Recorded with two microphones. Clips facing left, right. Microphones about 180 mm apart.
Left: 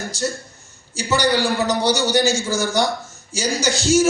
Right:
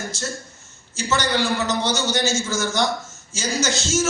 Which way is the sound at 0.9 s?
15° left (ahead or behind).